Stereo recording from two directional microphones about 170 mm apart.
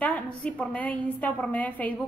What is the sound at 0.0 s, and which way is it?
A woman's voice, 10° left (ahead or behind).